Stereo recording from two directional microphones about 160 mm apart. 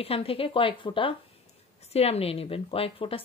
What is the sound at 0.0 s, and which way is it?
A woman's voice, 35° left (ahead or behind).